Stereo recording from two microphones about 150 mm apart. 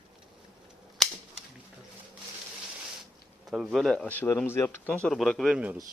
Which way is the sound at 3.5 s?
Centre (ahead or behind).